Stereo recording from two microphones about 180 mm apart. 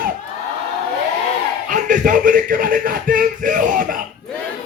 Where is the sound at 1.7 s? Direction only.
45° right (ahead or behind).